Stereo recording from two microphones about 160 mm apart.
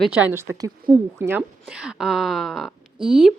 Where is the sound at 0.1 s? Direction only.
10° right (ahead or behind).